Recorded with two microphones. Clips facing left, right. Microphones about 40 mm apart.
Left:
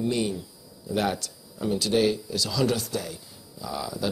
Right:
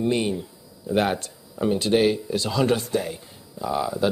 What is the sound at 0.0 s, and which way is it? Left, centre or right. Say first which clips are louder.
Speech: right 3 dB; right.